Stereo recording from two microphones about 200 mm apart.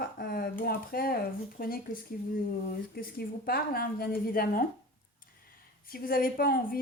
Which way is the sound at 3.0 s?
50° left (ahead or behind).